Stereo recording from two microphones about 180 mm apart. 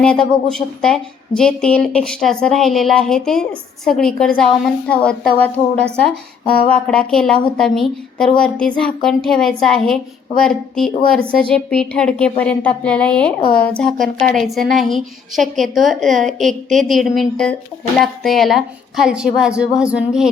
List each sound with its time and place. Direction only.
0.0 s a woman's voice: 5° left (ahead or behind)